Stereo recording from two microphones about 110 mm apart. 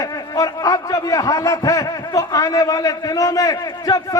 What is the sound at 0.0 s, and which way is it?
Speech, 30° left (ahead or behind).